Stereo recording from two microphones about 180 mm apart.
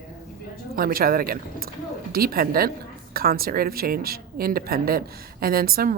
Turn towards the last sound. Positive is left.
turn(degrees=-55)  # may be behind; listen again after turning